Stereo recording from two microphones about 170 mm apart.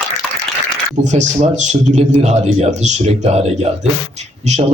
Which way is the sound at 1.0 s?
45° right (ahead or behind).